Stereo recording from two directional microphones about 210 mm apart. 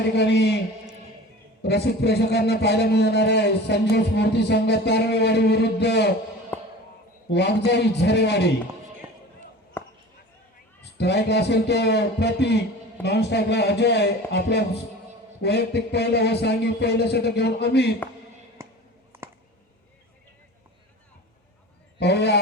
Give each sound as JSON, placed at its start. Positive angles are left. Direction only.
{"t": 0.0, "sound": "a man's voice", "side_deg": 55}
{"t": 1.6, "sound": "a man's voice", "side_deg": 50}
{"t": 6.5, "sound": "basketball bounce", "side_deg": 10}
{"t": 7.3, "sound": "a man's voice", "side_deg": 55}
{"t": 9.8, "sound": "basketball bounce", "side_deg": 10}
{"t": 10.9, "sound": "a man's voice", "side_deg": 50}
{"t": 18.6, "sound": "a sound", "side_deg": -15}
{"t": 21.9, "sound": "a man's voice", "side_deg": 55}